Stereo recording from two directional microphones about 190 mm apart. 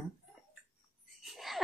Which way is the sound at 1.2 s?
Centre (ahead or behind).